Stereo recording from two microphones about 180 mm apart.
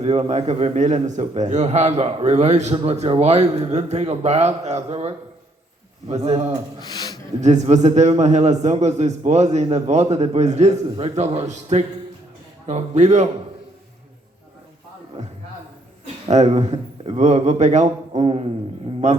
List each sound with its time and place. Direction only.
0.0 s a man's voice: 35° right (ahead or behind)
6.7 s speech: 25° left (ahead or behind)
7.4 s a man's voice: 40° right (ahead or behind)
16.3 s a man's voice: 40° right (ahead or behind)